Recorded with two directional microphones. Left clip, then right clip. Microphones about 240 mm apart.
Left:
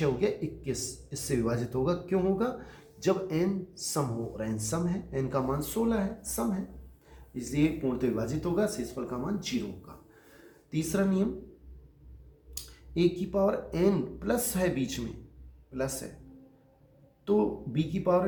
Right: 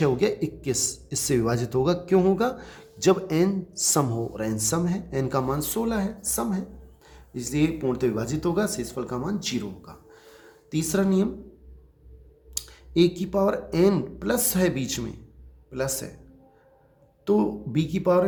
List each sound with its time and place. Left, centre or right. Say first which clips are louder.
0.0 s speech: right 6 dB; right
12.5 s speech: right 9 dB; right
17.2 s speech: right 4 dB; right